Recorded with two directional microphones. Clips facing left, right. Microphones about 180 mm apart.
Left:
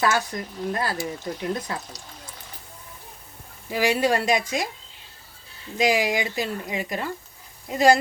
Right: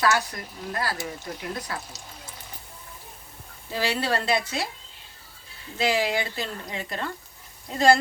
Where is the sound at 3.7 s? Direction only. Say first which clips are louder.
Left 5 dB; 15° left (ahead or behind).